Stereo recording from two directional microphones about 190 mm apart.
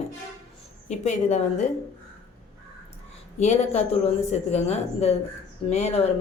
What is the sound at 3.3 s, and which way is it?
Speech, 35° left (ahead or behind).